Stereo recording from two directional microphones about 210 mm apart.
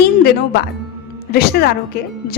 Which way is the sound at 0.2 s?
45° left (ahead or behind).